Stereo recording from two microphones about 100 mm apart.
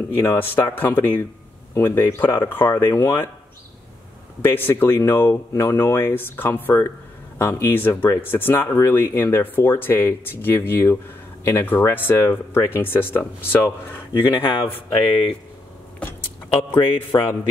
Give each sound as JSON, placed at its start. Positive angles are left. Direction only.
{"t": 0.1, "sound": "speech", "side_deg": 20}
{"t": 4.4, "sound": "speech", "side_deg": 20}
{"t": 14.3, "sound": "speech", "side_deg": 60}
{"t": 17.1, "sound": "speech", "side_deg": 40}